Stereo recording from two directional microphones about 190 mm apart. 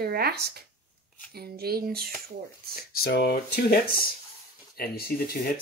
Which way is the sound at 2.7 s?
55° left (ahead or behind).